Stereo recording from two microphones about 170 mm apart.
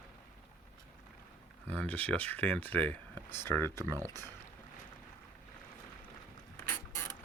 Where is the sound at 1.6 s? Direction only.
10° left (ahead or behind).